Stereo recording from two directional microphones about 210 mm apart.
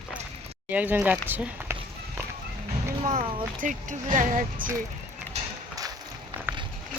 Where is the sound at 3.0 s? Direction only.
30° right (ahead or behind).